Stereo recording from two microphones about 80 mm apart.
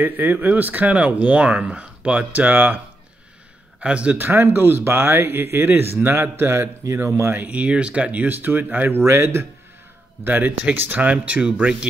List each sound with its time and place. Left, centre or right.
0.0 s speech: right
3.8 s a man's voice: centre
4.3 s speech: right
7.4 s speech: centre